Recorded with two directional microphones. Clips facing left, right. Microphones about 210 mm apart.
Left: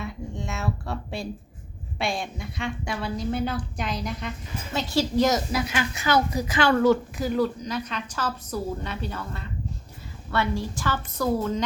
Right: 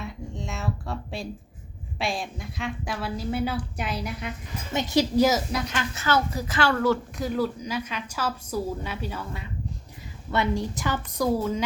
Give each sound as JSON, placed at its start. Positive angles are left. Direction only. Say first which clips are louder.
{"t": 0.0, "sound": "a sound", "louder": "left 2 dB", "side_deg": 0}
{"t": 2.0, "sound": "a woman's voice", "louder": "left 1 dB", "side_deg": 0}
{"t": 4.7, "sound": "a woman's voice", "louder": "right 2 dB", "side_deg": -20}
{"t": 5.5, "sound": "speech", "louder": "left 2 dB", "side_deg": 5}
{"t": 7.2, "sound": "a woman's voice", "louder": "left 2 dB", "side_deg": 0}